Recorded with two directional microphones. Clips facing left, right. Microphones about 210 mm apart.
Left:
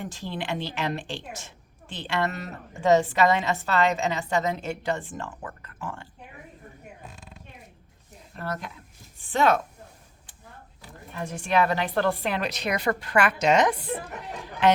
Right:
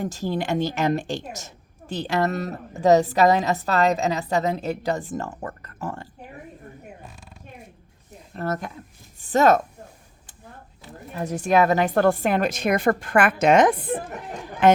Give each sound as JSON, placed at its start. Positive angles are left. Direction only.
{"t": 0.0, "sound": "a woman's voice", "side_deg": -40}
{"t": 8.3, "sound": "speech", "side_deg": -45}
{"t": 11.1, "sound": "speech", "side_deg": -40}